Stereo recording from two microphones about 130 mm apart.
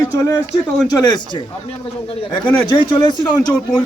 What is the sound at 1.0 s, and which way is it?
Speech, 35° left (ahead or behind).